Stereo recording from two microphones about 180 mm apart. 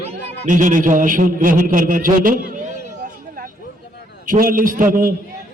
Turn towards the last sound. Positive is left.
turn(degrees=-50)  # may be behind; listen again after turning